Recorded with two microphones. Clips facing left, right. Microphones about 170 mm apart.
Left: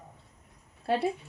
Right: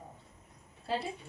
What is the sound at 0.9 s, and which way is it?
Speech, 65° left (ahead or behind).